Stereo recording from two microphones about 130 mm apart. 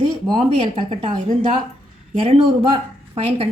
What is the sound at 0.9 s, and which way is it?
Speech, 40° right (ahead or behind).